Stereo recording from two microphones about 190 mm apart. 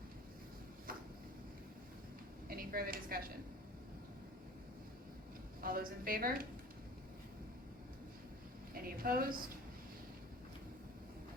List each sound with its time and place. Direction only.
2.5 s a woman's voice: 50° right (ahead or behind)
5.6 s a woman's voice: 50° right (ahead or behind)
8.7 s a woman's voice: 50° right (ahead or behind)